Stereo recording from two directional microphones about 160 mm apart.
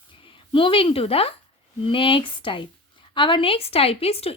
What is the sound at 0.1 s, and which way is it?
A woman's voice, 30° left (ahead or behind).